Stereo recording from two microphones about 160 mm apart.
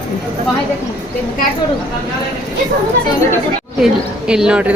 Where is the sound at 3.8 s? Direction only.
5° right (ahead or behind).